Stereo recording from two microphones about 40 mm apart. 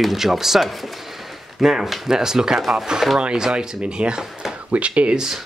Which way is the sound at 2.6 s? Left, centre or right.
Centre.